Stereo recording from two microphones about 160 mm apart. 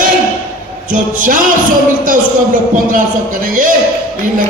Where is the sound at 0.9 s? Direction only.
55° right (ahead or behind).